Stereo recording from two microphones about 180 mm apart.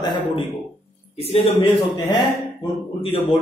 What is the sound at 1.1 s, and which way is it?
Speech, 35° left (ahead or behind).